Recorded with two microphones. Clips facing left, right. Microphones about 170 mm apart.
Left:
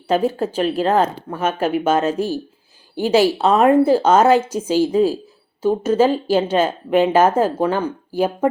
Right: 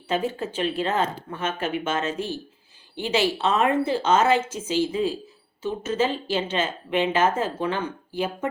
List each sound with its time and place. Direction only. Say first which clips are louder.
0.1 s speech: left 8 dB; 35° left (ahead or behind)